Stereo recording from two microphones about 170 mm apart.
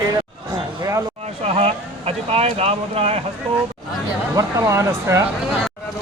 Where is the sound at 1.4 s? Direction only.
35° right (ahead or behind).